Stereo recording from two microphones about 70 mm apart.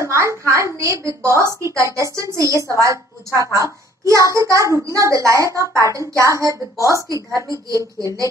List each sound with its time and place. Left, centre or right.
0.0 s a woman's voice: right
1.4 s a woman's voice: left
1.9 s a woman's voice: right